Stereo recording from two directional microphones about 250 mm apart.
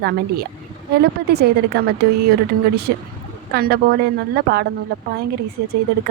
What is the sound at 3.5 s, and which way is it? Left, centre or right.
A woman's voice, right.